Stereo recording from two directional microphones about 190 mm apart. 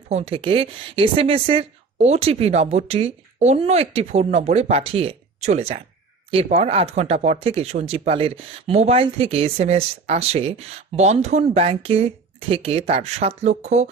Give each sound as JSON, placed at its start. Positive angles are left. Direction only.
{"t": 0.1, "sound": "a woman's voice", "side_deg": -30}